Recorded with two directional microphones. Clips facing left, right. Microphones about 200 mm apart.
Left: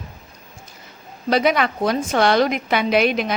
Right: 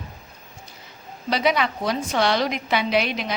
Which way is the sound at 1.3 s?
50° left (ahead or behind).